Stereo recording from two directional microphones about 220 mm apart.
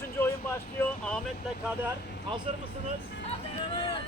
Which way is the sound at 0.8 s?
5° left (ahead or behind).